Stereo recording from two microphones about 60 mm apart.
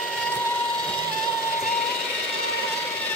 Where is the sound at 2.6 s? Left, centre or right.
Left.